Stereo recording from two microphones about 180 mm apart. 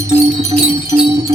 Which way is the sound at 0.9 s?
30° right (ahead or behind).